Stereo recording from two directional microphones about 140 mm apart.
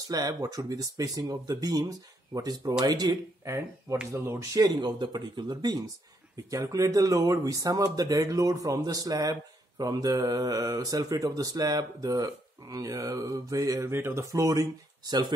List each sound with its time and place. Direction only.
0.1 s speech: 25° right (ahead or behind)